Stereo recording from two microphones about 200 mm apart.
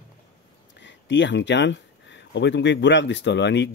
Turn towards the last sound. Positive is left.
turn(degrees=60)  # may be behind; listen again after turning